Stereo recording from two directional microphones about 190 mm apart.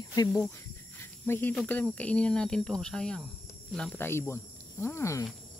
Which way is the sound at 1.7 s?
5° left (ahead or behind).